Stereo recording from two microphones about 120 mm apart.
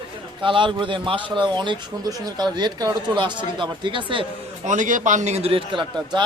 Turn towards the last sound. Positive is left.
turn(degrees=-40)  # may be behind; listen again after turning